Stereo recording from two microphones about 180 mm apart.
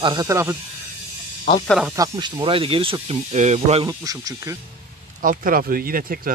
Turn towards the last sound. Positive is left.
turn(degrees=-50)  # may be behind; listen again after turning